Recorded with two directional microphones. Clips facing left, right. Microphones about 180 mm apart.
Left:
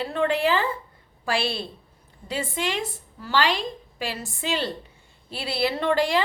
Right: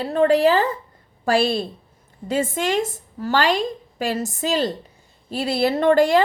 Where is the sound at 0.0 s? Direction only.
40° right (ahead or behind).